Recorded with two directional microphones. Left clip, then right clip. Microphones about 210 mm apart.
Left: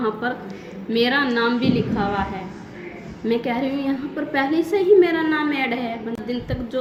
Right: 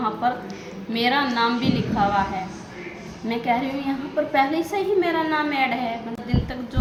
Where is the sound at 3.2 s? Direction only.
15° right (ahead or behind).